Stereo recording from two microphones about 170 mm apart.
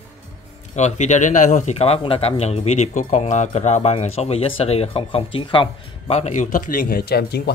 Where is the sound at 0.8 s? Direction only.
45° left (ahead or behind).